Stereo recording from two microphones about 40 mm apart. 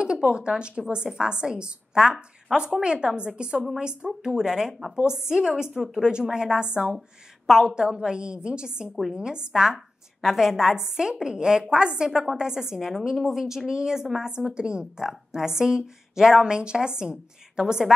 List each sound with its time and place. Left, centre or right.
0.0 s a sound: right
0.6 s a woman's voice: right; by 5.9 s centre
5.9 s a woman's voice: centre
10.2 s a woman's voice: centre